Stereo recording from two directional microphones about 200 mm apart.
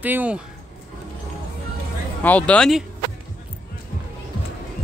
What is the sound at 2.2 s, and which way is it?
Speech, 5° left (ahead or behind).